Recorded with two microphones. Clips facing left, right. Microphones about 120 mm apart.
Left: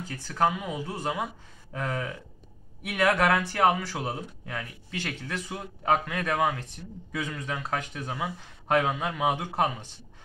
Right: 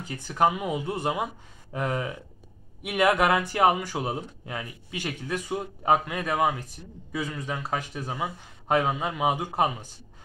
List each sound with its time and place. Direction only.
0.0 s speech: 15° right (ahead or behind)